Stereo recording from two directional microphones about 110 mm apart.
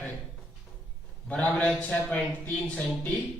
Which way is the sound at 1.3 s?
10° left (ahead or behind).